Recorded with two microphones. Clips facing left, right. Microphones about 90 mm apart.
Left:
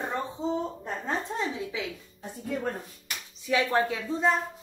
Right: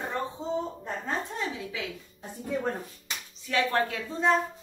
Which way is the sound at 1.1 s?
25° left (ahead or behind).